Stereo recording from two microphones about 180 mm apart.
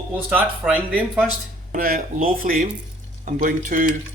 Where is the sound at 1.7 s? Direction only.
55° right (ahead or behind).